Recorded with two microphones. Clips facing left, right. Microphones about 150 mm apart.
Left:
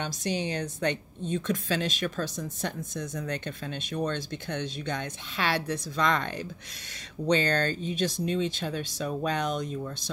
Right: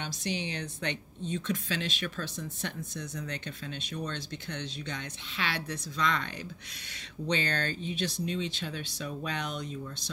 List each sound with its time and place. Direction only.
0.0 s a woman's voice: 45° left (ahead or behind)